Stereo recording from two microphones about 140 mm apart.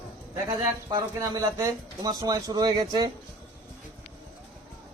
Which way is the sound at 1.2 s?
25° right (ahead or behind).